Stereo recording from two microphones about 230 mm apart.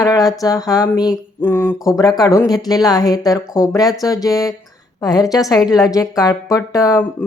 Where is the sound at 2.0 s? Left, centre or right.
Centre.